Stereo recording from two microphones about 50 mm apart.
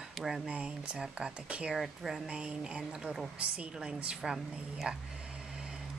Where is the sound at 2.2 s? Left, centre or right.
Right; by 3.3 s centre.